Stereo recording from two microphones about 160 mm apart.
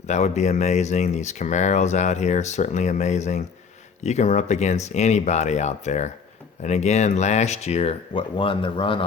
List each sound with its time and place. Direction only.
0.1 s speech: 45° left (ahead or behind)